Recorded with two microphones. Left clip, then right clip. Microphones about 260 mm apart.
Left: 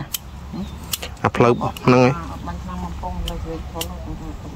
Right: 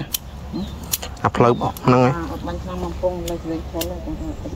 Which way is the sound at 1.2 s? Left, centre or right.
Left.